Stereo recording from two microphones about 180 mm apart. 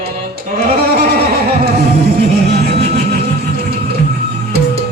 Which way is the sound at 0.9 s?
60° right (ahead or behind).